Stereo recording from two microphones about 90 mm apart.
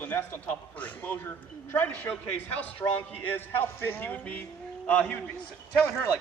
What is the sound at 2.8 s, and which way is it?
Speech, 35° left (ahead or behind).